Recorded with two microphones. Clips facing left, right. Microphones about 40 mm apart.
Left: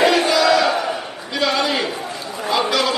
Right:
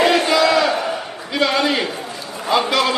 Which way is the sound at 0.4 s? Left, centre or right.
Centre.